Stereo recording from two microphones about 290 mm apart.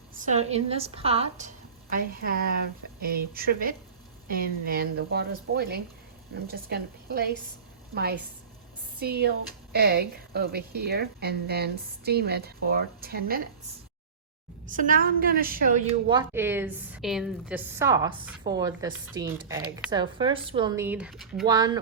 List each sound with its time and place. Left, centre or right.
0.2 s a woman's voice: right
9.0 s a woman's voice: right
14.7 s a woman's voice: right
16.0 s a woman's voice: centre
21.4 s a woman's voice: centre